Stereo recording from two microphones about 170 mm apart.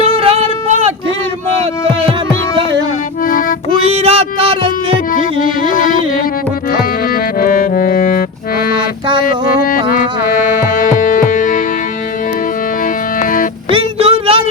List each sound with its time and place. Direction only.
0.0 s a sound: 35° right (ahead or behind)
3.8 s music: 35° right (ahead or behind)
5.7 s music: 50° left (ahead or behind)
13.1 s music: 55° left (ahead or behind)
13.7 s child singing: 35° right (ahead or behind)